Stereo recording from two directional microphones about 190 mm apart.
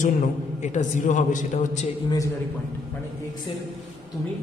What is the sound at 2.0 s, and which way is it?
Speech, 15° left (ahead or behind).